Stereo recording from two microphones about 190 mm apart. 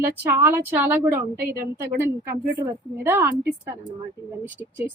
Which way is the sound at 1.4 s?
55° right (ahead or behind).